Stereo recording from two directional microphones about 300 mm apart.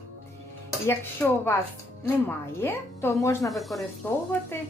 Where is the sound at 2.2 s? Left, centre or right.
Centre.